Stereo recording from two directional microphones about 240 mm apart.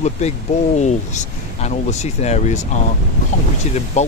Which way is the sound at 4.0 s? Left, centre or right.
Left.